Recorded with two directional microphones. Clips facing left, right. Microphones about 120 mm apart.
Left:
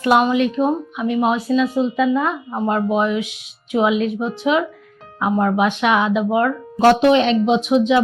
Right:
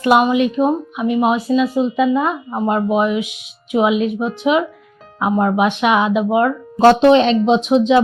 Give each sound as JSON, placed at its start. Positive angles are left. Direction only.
{"t": 0.1, "sound": "speech", "side_deg": -15}
{"t": 6.7, "sound": "speech", "side_deg": -30}